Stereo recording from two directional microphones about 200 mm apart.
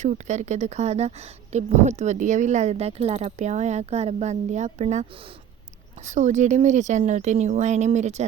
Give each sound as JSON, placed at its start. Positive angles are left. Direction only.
{"t": 0.0, "sound": "speech", "side_deg": -35}
{"t": 6.1, "sound": "speech", "side_deg": -35}